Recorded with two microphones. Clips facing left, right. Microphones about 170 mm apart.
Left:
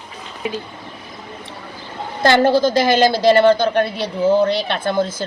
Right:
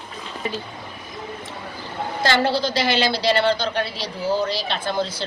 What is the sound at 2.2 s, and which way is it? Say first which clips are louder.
A woman's voice: left 7 dB; 50° left (ahead or behind).